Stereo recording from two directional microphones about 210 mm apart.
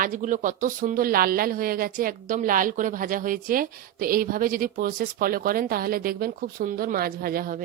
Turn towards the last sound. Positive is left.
turn(degrees=-45)  # may be behind; listen again after turning